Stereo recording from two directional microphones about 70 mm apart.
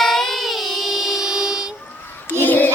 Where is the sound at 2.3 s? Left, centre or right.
Left.